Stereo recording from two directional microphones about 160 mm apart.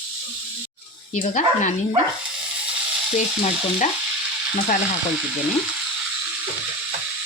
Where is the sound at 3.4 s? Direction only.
45° left (ahead or behind).